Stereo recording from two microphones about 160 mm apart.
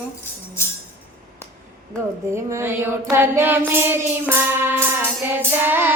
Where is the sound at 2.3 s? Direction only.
15° right (ahead or behind).